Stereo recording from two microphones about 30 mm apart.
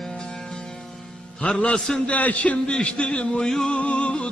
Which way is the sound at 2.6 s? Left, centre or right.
Left.